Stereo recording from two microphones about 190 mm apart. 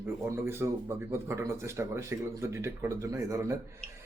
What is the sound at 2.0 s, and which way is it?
Speech, 15° right (ahead or behind).